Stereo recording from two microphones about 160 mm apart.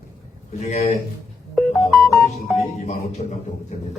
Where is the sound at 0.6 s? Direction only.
45° left (ahead or behind).